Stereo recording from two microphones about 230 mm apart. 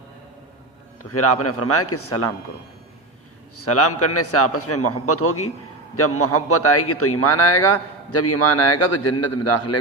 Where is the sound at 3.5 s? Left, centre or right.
Left.